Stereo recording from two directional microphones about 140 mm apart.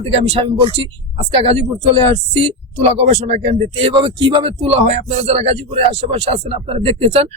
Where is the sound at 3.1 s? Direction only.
50° right (ahead or behind).